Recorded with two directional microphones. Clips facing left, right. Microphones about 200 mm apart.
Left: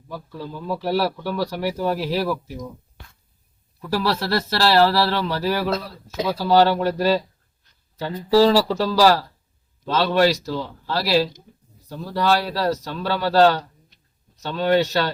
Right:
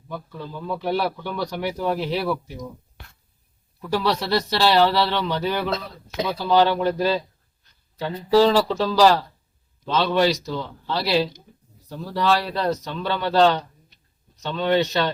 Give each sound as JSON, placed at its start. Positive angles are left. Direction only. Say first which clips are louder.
{"t": 0.1, "sound": "speech", "louder": "left 1 dB", "side_deg": 5}
{"t": 4.0, "sound": "speech", "louder": "even", "side_deg": 5}
{"t": 8.4, "sound": "speech", "louder": "left 1 dB", "side_deg": 5}